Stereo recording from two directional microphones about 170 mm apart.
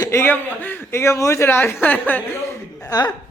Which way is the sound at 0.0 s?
15° left (ahead or behind).